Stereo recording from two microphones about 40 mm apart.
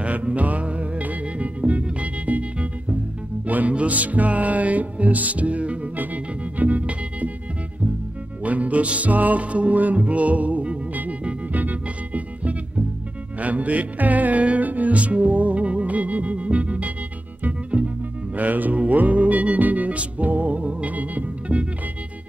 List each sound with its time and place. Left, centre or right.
0.0 s music: right
8.5 s music: right